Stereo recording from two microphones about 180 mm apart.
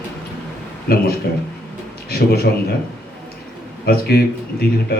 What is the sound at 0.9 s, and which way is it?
A man's voice, 60° left (ahead or behind).